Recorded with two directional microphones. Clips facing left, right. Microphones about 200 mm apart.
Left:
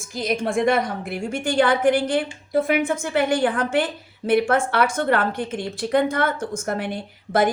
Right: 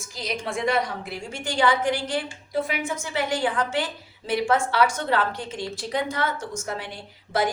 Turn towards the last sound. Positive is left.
turn(degrees=55)  # may be behind; listen again after turning